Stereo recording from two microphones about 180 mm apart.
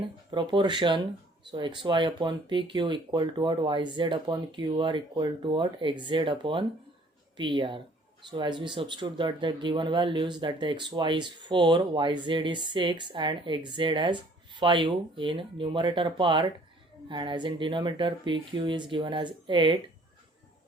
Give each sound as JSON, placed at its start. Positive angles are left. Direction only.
{"t": 0.3, "sound": "speech", "side_deg": -25}